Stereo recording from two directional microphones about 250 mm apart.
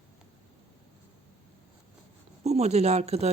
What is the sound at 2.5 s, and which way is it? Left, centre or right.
Speech, right.